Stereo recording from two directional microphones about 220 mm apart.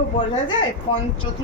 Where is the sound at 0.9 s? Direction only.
20° left (ahead or behind).